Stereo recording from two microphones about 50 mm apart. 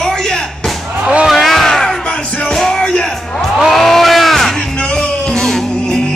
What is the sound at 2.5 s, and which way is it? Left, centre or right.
Music, centre.